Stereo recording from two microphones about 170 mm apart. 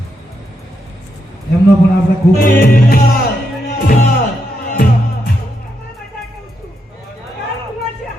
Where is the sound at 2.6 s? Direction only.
65° left (ahead or behind).